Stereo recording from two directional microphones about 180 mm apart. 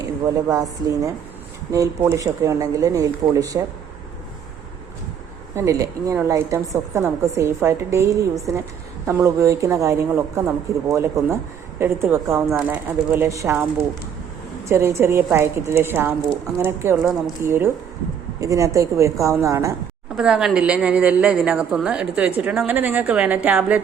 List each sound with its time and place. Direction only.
0.0 s a woman's voice: 20° right (ahead or behind)
1.7 s a woman's voice: 15° right (ahead or behind)
5.5 s a woman's voice: 15° right (ahead or behind)
14.6 s a woman's voice: 15° right (ahead or behind)
17.0 s speech: centre (ahead or behind)
17.4 s a woman's voice: 15° right (ahead or behind)
20.1 s a woman's voice: 5° right (ahead or behind)